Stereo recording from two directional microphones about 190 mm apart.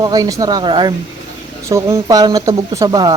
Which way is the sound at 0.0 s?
20° right (ahead or behind).